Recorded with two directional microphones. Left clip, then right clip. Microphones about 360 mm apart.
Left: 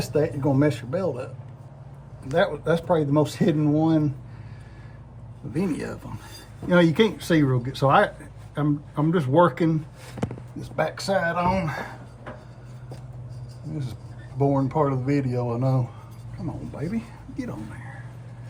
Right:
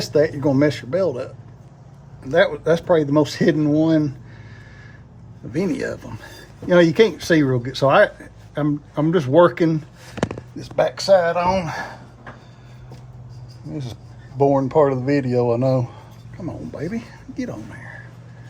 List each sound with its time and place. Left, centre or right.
0.0 s speech: right
2.3 s speech: right
5.5 s speech: right
14.3 s speech: right